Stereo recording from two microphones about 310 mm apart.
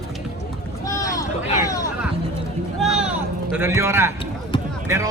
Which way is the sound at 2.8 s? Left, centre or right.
Centre.